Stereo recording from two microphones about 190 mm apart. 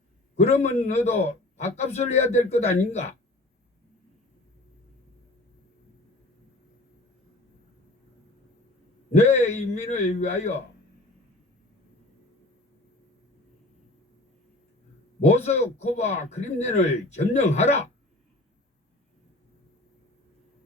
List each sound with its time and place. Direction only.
0.3 s speech: 35° left (ahead or behind)
9.1 s speech: 35° left (ahead or behind)
15.2 s speech: 35° left (ahead or behind)